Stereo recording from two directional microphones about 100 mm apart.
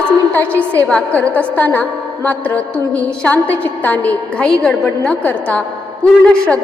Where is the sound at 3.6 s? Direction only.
15° left (ahead or behind).